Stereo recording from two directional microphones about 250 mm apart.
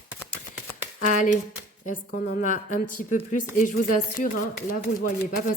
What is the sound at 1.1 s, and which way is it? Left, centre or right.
Speech, left.